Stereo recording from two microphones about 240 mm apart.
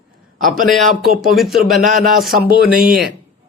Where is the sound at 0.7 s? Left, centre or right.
Centre.